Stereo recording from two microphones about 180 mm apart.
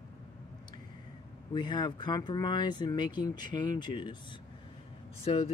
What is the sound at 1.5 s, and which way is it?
Speech, 25° left (ahead or behind).